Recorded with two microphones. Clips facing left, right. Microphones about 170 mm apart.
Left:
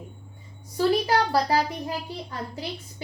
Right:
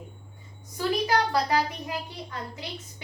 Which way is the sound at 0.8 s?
35° left (ahead or behind).